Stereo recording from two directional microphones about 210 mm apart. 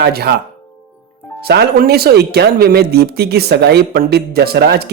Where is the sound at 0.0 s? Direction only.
50° right (ahead or behind).